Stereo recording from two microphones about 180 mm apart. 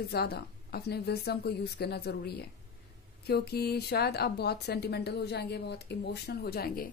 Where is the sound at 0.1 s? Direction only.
60° left (ahead or behind).